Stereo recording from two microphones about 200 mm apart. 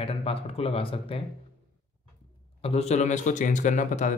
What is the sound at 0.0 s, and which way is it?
Speech, 30° left (ahead or behind).